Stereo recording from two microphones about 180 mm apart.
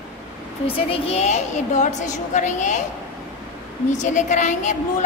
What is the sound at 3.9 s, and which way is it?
Speech, 45° left (ahead or behind).